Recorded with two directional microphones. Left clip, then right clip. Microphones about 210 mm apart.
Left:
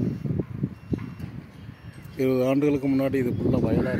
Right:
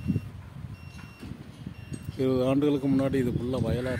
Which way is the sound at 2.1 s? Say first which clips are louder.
Left 3 dB; 10° left (ahead or behind).